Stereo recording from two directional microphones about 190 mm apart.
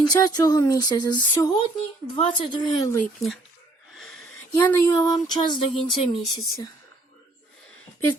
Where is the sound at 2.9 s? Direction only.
5° left (ahead or behind).